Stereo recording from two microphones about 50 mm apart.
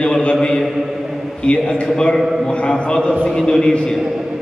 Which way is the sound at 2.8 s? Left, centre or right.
Left.